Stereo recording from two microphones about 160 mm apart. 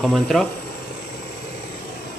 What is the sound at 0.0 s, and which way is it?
Speech, centre (ahead or behind).